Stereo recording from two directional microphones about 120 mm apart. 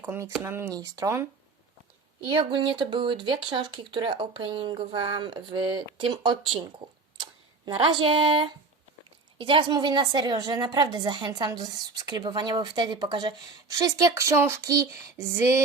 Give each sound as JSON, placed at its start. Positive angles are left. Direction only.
{"t": 0.0, "sound": "speech", "side_deg": -25}
{"t": 2.2, "sound": "a woman's voice", "side_deg": -45}